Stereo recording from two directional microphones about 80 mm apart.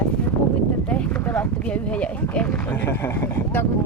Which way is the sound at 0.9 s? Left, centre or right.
Centre.